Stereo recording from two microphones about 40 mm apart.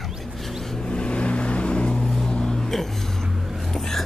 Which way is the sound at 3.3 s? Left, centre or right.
Centre.